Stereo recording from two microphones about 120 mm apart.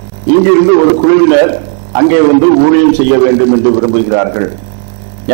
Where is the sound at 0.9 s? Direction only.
20° right (ahead or behind).